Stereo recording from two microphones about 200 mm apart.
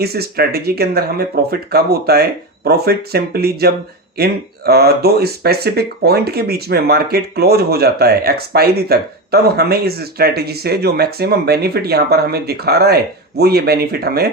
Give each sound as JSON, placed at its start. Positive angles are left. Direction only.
{"t": 0.0, "sound": "speech", "side_deg": -50}